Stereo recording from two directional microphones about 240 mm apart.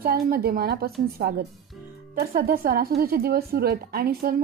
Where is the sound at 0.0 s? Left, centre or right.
Right.